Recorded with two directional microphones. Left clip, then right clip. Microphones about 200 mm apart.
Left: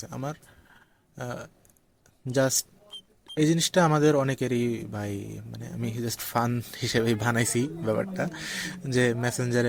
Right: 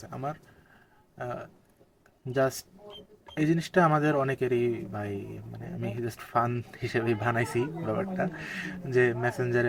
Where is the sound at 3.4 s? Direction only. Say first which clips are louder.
Left 2 dB; 45° left (ahead or behind).